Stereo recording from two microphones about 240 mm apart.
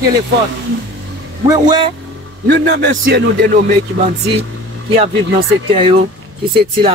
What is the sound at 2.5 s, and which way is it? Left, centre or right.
Speech, right.